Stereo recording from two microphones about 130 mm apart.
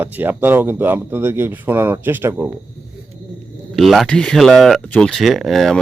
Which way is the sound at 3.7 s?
Centre (ahead or behind).